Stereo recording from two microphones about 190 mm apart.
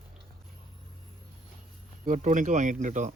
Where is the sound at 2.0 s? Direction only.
40° right (ahead or behind).